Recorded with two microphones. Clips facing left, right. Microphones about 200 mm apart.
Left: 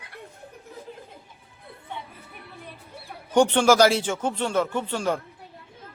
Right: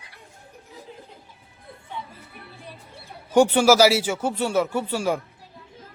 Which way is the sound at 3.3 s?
10° right (ahead or behind).